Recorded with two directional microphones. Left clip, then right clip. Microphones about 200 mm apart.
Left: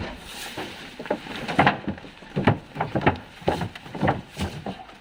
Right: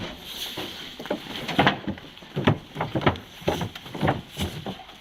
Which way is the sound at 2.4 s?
20° right (ahead or behind).